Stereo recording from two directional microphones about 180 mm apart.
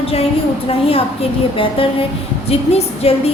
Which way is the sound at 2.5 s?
35° left (ahead or behind).